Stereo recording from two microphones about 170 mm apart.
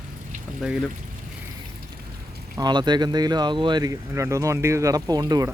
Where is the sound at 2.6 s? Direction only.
25° right (ahead or behind).